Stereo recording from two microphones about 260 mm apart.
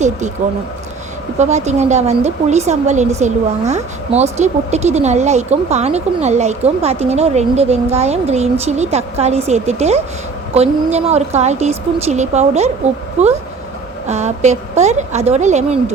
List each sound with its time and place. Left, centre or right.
0.4 s a woman's voice: right